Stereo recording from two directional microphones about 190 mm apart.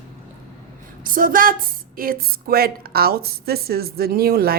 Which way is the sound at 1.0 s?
45° right (ahead or behind).